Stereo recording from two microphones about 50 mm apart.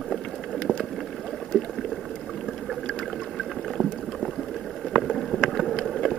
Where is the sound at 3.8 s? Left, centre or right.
Centre.